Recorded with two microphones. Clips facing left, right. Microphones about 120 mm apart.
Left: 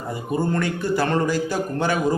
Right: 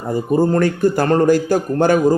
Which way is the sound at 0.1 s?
40° right (ahead or behind).